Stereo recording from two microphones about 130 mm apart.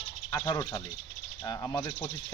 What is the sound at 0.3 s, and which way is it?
Speech, 25° left (ahead or behind).